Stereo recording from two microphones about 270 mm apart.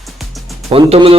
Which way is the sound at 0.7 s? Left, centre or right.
Right.